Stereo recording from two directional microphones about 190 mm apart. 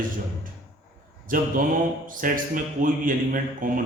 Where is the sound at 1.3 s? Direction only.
45° right (ahead or behind).